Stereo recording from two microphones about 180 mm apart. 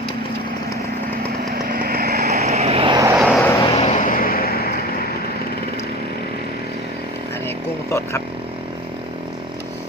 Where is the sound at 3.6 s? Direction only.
35° left (ahead or behind); by 5.1 s 55° left (ahead or behind).